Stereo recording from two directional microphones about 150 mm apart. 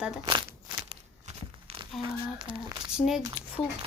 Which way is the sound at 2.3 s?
30° right (ahead or behind).